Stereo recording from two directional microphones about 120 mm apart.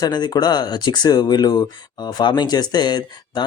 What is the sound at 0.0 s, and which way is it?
Speech, 35° left (ahead or behind).